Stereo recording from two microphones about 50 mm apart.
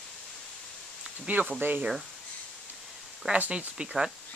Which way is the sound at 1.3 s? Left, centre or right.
Right.